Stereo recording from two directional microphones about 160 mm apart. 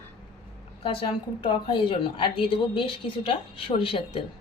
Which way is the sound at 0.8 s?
30° left (ahead or behind).